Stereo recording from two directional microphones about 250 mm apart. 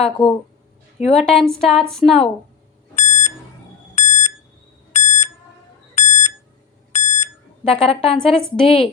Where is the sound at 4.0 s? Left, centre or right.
Left.